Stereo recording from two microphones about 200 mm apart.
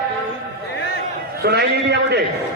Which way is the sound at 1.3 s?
55° right (ahead or behind).